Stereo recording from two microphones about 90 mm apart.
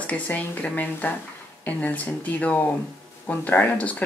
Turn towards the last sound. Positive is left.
turn(degrees=15)  # may be behind; listen again after turning